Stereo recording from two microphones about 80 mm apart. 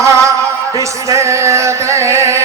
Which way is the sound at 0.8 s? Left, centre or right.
Right.